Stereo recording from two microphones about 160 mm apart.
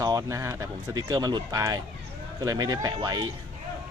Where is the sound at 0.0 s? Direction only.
20° right (ahead or behind).